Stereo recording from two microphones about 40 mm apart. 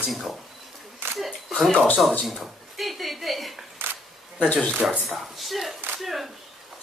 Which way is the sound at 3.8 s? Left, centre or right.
Right.